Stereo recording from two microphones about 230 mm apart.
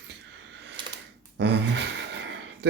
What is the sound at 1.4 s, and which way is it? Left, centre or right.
Speech, right.